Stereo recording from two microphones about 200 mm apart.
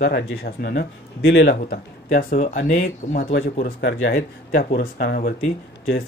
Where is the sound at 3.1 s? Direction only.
65° left (ahead or behind).